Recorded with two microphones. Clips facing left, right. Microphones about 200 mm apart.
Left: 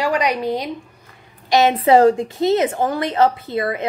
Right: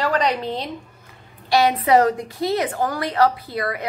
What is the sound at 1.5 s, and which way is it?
A woman's voice, 25° left (ahead or behind).